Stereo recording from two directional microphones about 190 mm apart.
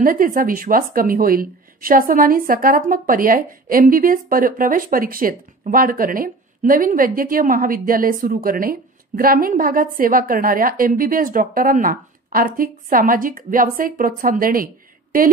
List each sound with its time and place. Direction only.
0.0 s a woman's voice: 45° right (ahead or behind)